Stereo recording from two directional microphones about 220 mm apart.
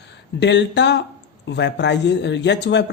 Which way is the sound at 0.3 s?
50° left (ahead or behind).